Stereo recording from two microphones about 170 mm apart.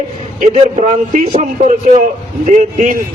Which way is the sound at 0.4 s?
40° right (ahead or behind).